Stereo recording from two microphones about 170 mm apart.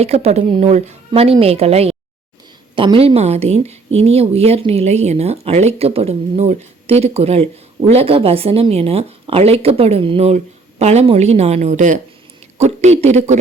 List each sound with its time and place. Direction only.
0.0 s a woman's voice: 35° right (ahead or behind)